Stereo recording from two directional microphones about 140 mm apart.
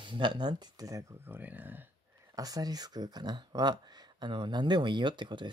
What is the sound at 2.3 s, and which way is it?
Speech, 25° right (ahead or behind).